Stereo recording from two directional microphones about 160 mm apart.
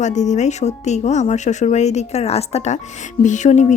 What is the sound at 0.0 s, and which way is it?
Speech, 45° left (ahead or behind).